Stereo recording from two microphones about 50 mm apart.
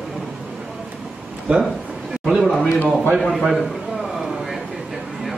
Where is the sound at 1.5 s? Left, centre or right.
Right.